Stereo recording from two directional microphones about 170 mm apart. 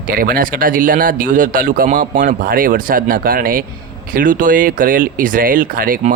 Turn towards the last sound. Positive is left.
turn(degrees=-55)  # may be behind; listen again after turning